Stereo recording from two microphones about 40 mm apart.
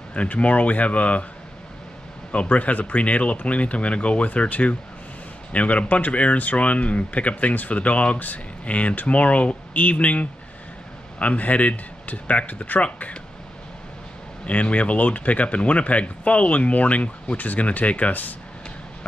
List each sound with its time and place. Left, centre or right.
0.1 s speech: left
2.3 s speech: left
14.4 s speech: left